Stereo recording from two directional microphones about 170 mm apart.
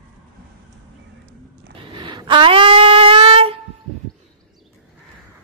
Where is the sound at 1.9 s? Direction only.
25° right (ahead or behind).